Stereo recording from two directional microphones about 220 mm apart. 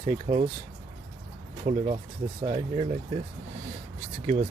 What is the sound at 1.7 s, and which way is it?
Speech, 30° right (ahead or behind).